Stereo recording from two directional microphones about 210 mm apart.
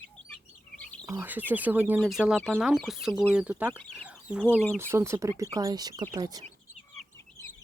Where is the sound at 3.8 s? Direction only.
5° left (ahead or behind).